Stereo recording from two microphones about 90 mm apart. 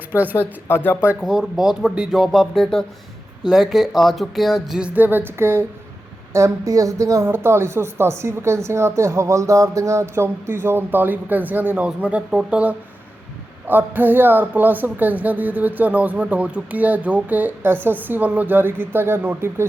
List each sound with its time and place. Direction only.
0.1 s speech: 20° right (ahead or behind)
0.3 s speech: 20° left (ahead or behind)
1.2 s speech: 5° right (ahead or behind)
4.9 s speech: 20° right (ahead or behind)
6.3 s speech: 35° right (ahead or behind)